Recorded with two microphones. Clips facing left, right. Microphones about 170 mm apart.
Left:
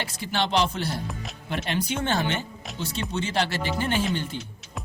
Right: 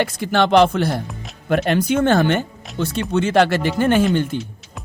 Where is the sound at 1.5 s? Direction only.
50° right (ahead or behind).